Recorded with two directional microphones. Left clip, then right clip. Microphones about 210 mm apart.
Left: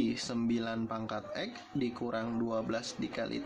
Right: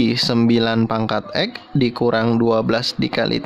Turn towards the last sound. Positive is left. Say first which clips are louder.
# right 17 dB
turn(degrees=-45)  # may be behind; listen again after turning